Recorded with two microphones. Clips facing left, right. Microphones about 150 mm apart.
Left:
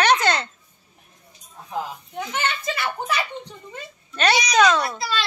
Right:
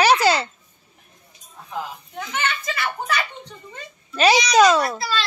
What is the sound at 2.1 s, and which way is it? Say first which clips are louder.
A child's voice: even; 20° left (ahead or behind).